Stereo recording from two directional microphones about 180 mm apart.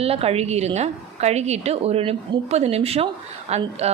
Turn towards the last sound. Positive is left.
turn(degrees=-35)  # may be behind; listen again after turning